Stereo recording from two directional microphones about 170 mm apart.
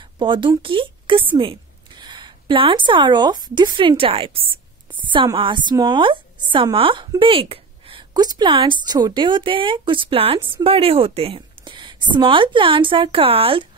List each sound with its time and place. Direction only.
0.2 s a woman's voice: 30° right (ahead or behind)